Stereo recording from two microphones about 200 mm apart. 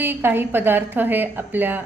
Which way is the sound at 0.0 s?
10° right (ahead or behind).